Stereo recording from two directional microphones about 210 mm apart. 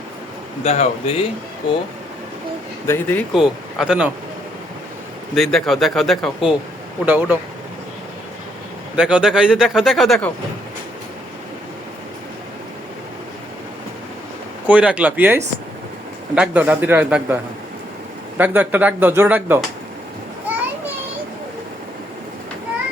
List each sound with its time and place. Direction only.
0.6 s speech: 30° left (ahead or behind)
2.8 s speech: 10° left (ahead or behind)
5.3 s speech: centre (ahead or behind)
9.0 s speech: 5° right (ahead or behind)
14.7 s speech: 5° right (ahead or behind)
18.3 s speech: 10° right (ahead or behind)